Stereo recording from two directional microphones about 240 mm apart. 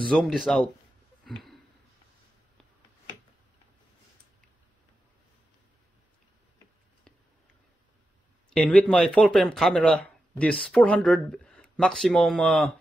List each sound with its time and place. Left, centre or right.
0.0 s speech: centre
1.2 s a sound: centre
8.5 s speech: centre